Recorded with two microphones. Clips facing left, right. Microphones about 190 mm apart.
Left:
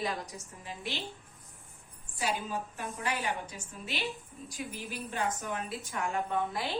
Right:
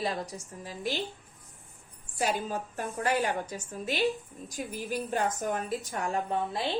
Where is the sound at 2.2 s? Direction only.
45° right (ahead or behind).